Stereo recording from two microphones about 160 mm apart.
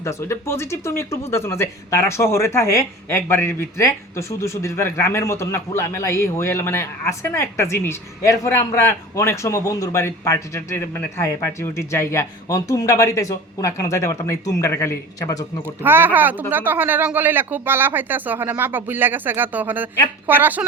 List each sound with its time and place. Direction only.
0.0 s a man's voice: 20° left (ahead or behind)
15.6 s speech: 15° right (ahead or behind)